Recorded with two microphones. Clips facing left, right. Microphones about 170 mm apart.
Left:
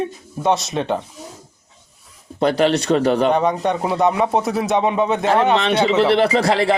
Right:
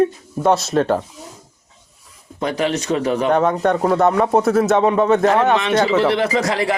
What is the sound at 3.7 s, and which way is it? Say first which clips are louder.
Speech: right 3 dB; 5° left (ahead or behind).